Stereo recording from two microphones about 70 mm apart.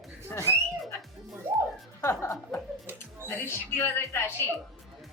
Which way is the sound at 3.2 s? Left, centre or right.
Left.